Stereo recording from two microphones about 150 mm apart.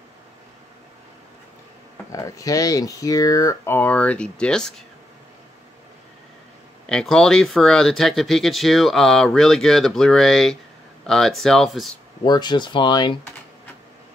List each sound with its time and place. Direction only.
2.1 s speech: 25° left (ahead or behind); by 4.8 s 5° left (ahead or behind)
6.9 s speech: 5° left (ahead or behind)
12.2 s speech: 30° left (ahead or behind)